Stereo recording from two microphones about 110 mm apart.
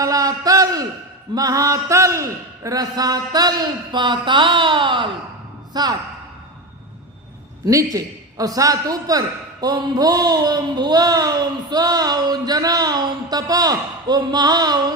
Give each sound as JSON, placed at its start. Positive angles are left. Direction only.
{"t": 0.0, "sound": "a sound", "side_deg": -35}
{"t": 1.4, "sound": "a man's voice", "side_deg": -30}
{"t": 5.7, "sound": "a man's voice", "side_deg": -35}
{"t": 7.6, "sound": "a man's voice", "side_deg": -30}